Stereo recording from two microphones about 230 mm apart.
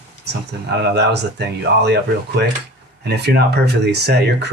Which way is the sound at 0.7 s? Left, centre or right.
Right.